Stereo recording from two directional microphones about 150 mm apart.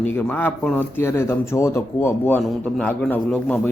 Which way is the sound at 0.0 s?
10° left (ahead or behind).